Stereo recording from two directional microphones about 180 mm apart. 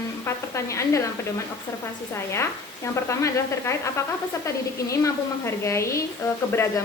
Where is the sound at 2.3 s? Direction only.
15° left (ahead or behind).